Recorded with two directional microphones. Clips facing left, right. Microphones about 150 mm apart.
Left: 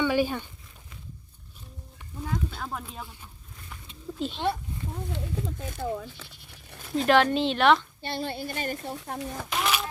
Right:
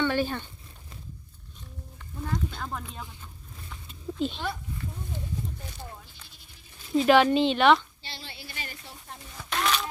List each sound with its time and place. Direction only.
0.0 s a sound: 10° left (ahead or behind)
2.2 s speech: 5° left (ahead or behind)
3.7 s a sound: centre (ahead or behind)
5.1 s speech: 75° left (ahead or behind)
6.9 s speech: 5° right (ahead or behind)
8.0 s a woman's voice: 50° left (ahead or behind)
9.0 s speech: 70° left (ahead or behind)
9.5 s a child's voice: 5° left (ahead or behind)